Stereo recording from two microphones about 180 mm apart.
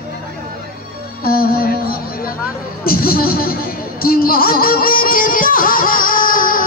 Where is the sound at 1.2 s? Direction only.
55° left (ahead or behind).